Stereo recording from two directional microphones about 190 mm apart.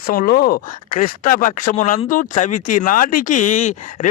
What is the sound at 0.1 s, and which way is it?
Speech, 50° left (ahead or behind).